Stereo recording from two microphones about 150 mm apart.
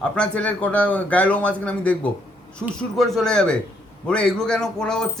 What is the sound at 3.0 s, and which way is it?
Speech, 5° left (ahead or behind).